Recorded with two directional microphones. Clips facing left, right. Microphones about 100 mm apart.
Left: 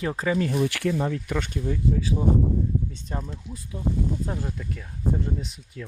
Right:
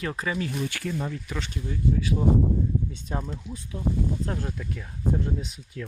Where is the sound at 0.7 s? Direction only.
90° left.